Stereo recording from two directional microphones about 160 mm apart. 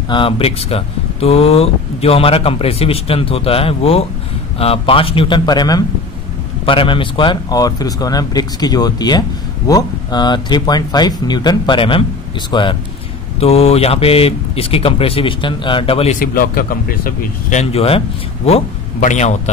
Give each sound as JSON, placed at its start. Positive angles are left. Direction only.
{"t": 0.1, "sound": "speech", "side_deg": 35}
{"t": 16.2, "sound": "speech", "side_deg": 65}
{"t": 18.9, "sound": "speech", "side_deg": 50}